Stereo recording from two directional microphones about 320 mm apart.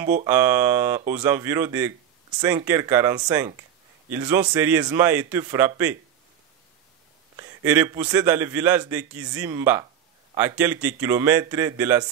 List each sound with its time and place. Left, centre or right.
0.3 s a man's voice: centre
7.3 s a man's voice: centre